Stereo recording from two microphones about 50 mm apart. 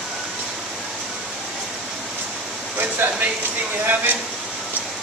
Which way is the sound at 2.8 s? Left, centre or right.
Right.